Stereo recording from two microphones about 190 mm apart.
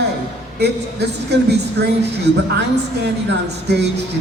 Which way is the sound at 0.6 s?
60° right (ahead or behind).